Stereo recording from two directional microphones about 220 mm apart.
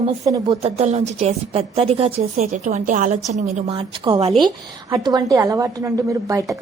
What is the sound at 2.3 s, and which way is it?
A woman's voice, 35° right (ahead or behind).